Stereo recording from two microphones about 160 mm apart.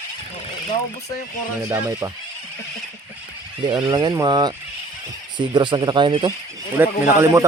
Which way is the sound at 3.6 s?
30° right (ahead or behind).